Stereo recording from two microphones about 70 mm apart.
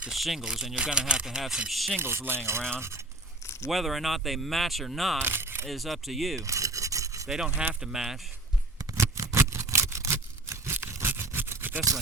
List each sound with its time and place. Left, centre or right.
0.1 s speech: centre
2.0 s speech: right
3.7 s speech: centre
5.2 s a sound: right
5.6 s speech: centre
6.4 s rub: right
7.3 s speech: centre
9.0 s a sound: right
10.8 s scrape: right